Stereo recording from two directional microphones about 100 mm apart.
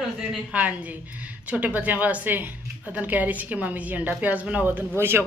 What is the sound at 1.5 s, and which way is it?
A woman's voice, 15° right (ahead or behind).